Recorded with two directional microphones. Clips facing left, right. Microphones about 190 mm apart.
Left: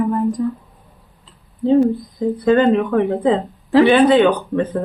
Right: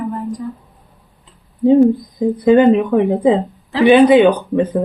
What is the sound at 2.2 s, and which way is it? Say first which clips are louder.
Speech: right 4 dB; 15° right (ahead or behind).